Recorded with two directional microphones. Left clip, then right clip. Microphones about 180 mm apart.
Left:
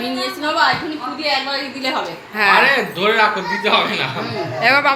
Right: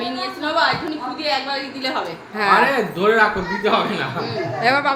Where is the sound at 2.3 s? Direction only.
10° right (ahead or behind).